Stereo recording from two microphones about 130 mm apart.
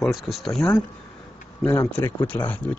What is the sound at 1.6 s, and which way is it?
Speech, 25° left (ahead or behind).